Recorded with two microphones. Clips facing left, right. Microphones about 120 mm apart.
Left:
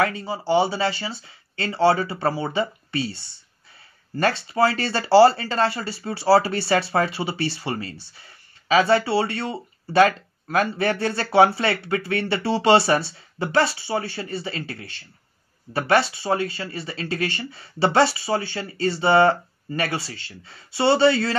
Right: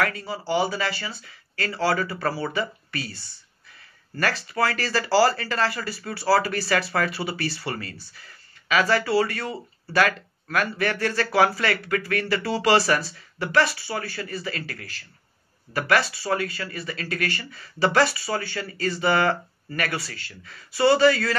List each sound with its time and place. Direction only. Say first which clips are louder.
0.0 s speech: left 3 dB; 25° left (ahead or behind)